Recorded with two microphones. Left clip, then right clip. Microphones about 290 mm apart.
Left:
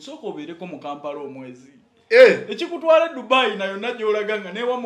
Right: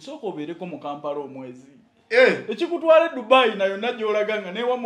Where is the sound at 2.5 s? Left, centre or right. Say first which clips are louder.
Even; right.